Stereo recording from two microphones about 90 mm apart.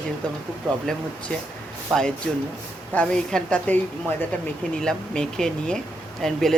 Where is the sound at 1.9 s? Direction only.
5° left (ahead or behind).